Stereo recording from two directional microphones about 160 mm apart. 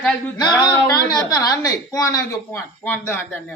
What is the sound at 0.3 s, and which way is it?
A woman's voice, 25° left (ahead or behind).